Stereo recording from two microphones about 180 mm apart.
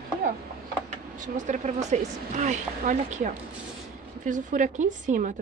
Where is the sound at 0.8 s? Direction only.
40° right (ahead or behind).